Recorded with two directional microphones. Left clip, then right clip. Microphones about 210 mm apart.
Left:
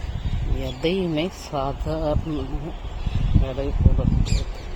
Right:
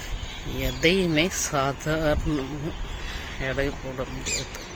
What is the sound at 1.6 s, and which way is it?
Speech, 20° right (ahead or behind).